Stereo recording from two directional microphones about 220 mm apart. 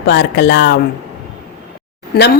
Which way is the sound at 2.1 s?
45° left (ahead or behind).